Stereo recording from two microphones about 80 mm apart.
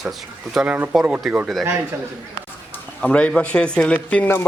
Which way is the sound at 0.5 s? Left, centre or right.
Centre.